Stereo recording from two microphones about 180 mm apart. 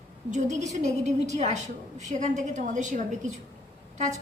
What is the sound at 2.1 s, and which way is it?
A woman's voice, 40° right (ahead or behind).